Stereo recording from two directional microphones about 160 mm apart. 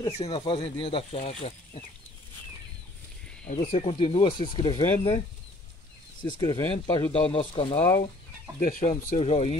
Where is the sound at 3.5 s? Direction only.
60° left (ahead or behind).